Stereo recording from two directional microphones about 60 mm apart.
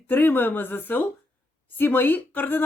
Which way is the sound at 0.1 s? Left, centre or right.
Left.